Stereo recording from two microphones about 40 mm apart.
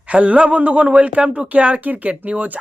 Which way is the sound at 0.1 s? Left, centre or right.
Right.